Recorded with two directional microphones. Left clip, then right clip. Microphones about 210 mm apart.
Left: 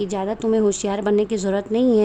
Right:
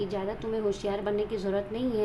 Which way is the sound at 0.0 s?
50° left (ahead or behind).